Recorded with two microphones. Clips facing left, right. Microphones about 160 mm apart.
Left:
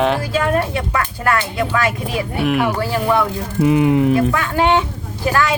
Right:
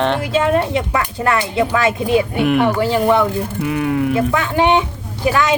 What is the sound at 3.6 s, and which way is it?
Speech, 25° left (ahead or behind).